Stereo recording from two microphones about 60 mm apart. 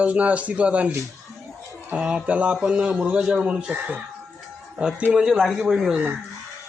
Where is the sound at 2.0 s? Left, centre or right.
Centre.